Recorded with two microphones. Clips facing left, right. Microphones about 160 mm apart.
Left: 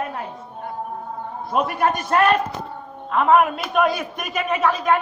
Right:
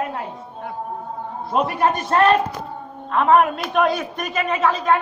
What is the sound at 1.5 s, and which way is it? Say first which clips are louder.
Speech: right 1 dB; 30° right (ahead or behind).